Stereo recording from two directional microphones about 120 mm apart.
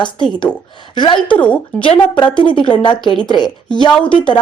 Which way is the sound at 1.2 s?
10° left (ahead or behind).